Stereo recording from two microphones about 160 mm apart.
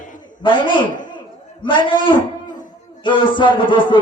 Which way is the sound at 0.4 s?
30° left (ahead or behind).